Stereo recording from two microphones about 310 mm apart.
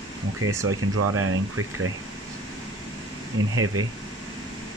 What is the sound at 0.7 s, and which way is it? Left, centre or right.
Speech, right.